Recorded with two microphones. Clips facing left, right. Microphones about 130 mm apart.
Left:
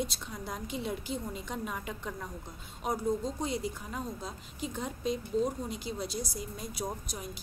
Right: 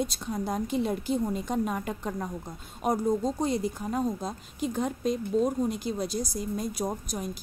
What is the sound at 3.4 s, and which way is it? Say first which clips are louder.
Speech: right 6 dB; 45° right (ahead or behind).